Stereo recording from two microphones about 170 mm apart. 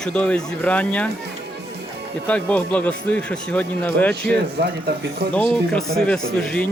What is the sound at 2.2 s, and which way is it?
Speech, 10° left (ahead or behind).